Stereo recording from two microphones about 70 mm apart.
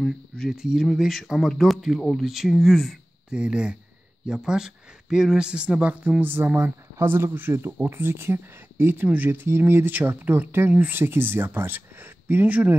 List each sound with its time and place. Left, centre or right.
0.5 s speech: centre
3.3 s speech: centre
6.2 s speech: right